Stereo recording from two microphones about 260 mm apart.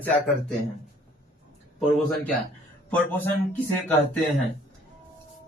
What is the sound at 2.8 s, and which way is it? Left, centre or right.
Speech, centre.